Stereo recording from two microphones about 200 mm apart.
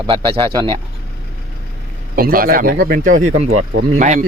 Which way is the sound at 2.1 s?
45° right (ahead or behind).